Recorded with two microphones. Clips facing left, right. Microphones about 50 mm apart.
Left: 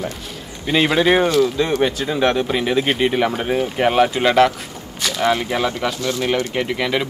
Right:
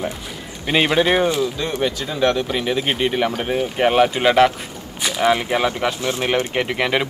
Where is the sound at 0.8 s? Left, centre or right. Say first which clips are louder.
Left 2 dB; centre.